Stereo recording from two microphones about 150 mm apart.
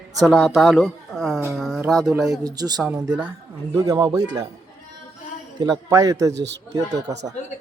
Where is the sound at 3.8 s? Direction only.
20° right (ahead or behind).